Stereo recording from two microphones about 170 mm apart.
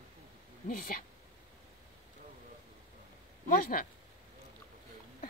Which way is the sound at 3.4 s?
55° left (ahead or behind).